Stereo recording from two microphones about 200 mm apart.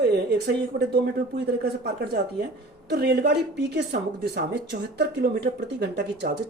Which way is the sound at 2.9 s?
55° right (ahead or behind).